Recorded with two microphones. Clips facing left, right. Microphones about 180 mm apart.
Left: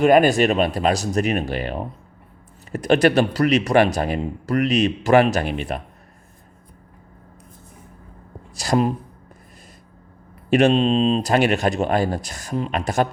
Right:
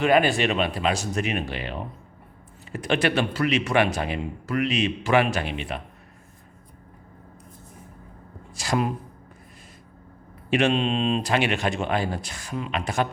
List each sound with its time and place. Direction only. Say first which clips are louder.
0.0 s speech: left 6 dB; 45° left (ahead or behind)
8.5 s speech: left 5 dB; 40° left (ahead or behind)
10.5 s speech: left 6 dB; 40° left (ahead or behind)